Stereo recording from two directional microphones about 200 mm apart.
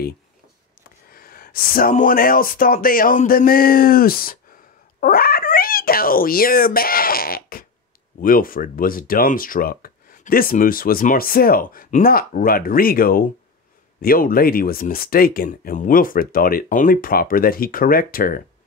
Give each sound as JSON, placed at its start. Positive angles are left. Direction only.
{"t": 1.1, "sound": "speech", "side_deg": 45}